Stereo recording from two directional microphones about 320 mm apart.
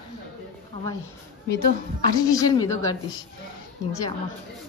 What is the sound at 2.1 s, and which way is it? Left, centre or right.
Speech, centre.